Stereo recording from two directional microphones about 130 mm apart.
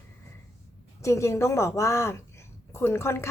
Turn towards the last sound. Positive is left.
turn(degrees=20)  # may be behind; listen again after turning